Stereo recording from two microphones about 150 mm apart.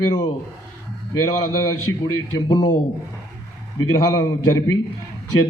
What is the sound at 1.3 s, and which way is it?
A man's voice, 25° left (ahead or behind).